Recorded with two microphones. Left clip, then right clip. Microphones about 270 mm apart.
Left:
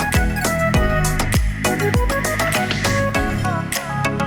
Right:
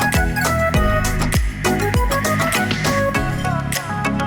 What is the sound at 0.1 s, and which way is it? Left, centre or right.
Music, centre.